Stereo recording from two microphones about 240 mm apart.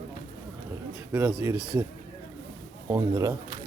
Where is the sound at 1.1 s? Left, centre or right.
Centre.